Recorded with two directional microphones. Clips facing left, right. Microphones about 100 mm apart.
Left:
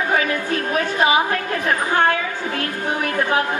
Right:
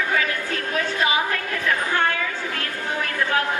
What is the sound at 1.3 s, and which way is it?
Chatter, 40° left (ahead or behind).